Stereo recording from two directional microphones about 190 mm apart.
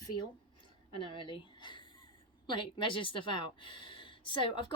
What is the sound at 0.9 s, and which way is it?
A woman's voice, 25° left (ahead or behind).